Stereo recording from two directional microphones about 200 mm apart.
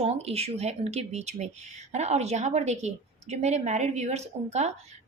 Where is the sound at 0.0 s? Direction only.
30° right (ahead or behind).